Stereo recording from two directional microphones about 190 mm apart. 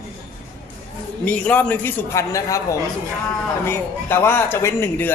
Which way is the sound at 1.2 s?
5° left (ahead or behind).